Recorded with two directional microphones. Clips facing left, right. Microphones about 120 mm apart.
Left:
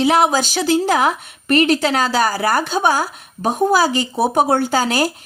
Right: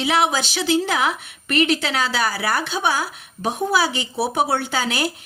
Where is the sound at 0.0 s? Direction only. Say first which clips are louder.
Left 5 dB; 40° left (ahead or behind).